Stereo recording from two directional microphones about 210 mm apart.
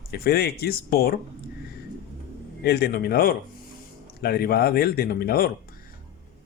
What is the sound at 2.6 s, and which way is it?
Speech, 50° left (ahead or behind).